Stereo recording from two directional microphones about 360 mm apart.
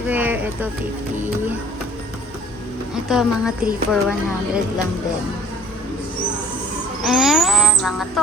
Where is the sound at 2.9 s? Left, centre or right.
Centre.